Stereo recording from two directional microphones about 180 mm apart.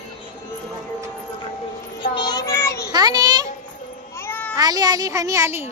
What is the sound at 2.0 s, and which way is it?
Child singing, 25° left (ahead or behind).